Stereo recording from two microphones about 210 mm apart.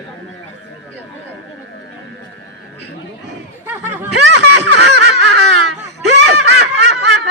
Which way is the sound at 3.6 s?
10° right (ahead or behind).